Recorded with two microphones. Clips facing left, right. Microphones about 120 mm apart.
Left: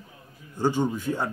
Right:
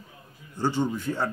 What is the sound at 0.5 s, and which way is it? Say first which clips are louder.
Speech: left 2 dB; 15° left (ahead or behind).